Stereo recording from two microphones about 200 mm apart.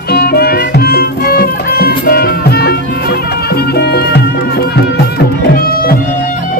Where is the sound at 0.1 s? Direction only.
50° left (ahead or behind).